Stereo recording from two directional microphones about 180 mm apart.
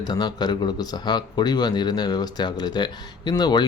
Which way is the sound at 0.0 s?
25° left (ahead or behind).